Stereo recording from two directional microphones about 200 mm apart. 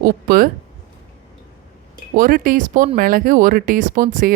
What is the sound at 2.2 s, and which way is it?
Speech, 45° right (ahead or behind).